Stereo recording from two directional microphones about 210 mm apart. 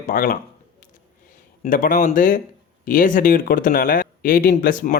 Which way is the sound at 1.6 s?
40° left (ahead or behind).